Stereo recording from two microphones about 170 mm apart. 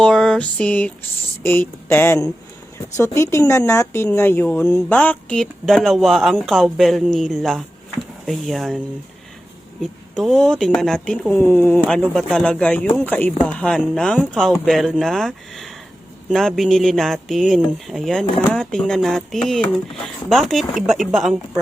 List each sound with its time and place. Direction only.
0.0 s a sound: 5° left (ahead or behind)
1.5 s speech: 10° left (ahead or behind)
9.8 s speech: centre (ahead or behind)